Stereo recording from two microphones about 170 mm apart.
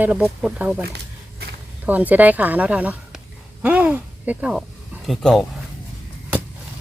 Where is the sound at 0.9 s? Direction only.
70° right (ahead or behind).